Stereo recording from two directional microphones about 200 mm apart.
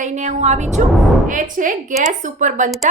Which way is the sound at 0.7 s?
Centre (ahead or behind).